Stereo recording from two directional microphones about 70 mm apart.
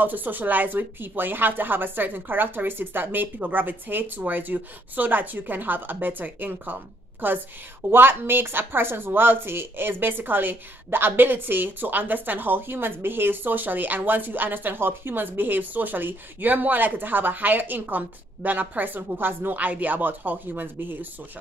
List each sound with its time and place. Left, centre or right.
0.0 s speech: right